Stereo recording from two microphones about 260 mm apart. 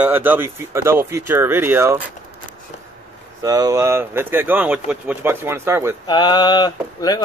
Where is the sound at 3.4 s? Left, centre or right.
Centre.